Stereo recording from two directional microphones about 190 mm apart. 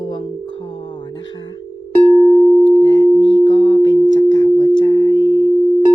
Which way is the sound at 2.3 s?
20° left (ahead or behind).